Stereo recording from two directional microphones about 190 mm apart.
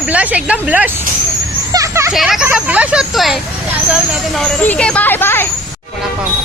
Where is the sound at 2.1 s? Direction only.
Centre (ahead or behind).